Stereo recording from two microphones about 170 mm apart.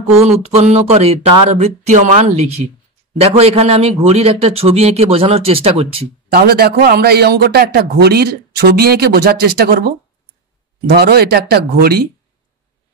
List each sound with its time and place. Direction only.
0.2 s a man's voice: 40° right (ahead or behind)
6.3 s a man's voice: 65° right (ahead or behind)